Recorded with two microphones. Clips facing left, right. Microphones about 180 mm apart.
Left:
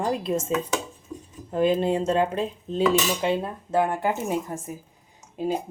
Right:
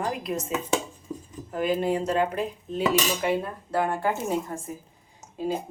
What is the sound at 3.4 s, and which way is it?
Speech, 20° left (ahead or behind).